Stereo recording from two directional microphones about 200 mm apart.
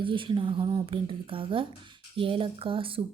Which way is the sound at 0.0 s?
25° right (ahead or behind).